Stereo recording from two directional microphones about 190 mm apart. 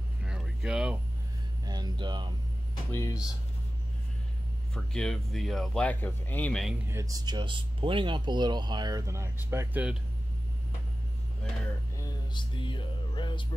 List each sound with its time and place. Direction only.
0.2 s a sound: 5° right (ahead or behind)
1.7 s speech: 20° right (ahead or behind)
2.9 s speech: 15° left (ahead or behind)
4.7 s speech: 5° left (ahead or behind)
6.9 s speech: 15° right (ahead or behind)
12.0 s mantra: 25° left (ahead or behind)